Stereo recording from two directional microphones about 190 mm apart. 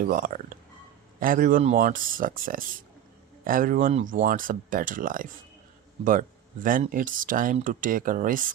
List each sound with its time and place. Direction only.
0.0 s speech: 45° right (ahead or behind)